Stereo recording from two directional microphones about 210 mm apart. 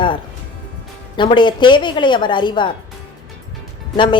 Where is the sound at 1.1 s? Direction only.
20° left (ahead or behind).